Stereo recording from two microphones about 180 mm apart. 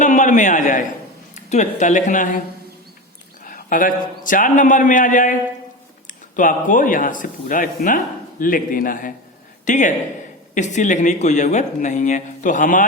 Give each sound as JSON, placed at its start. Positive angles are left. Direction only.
{"t": 0.0, "sound": "a man's voice", "side_deg": 45}
{"t": 3.4, "sound": "speech", "side_deg": 50}